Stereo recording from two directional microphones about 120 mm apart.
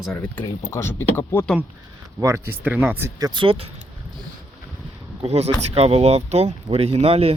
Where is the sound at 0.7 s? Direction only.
20° left (ahead or behind).